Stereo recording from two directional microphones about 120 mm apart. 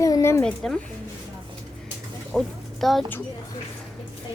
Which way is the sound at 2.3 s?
Centre (ahead or behind).